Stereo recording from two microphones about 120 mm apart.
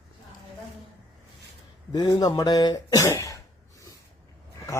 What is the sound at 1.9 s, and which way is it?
Speech, 35° left (ahead or behind).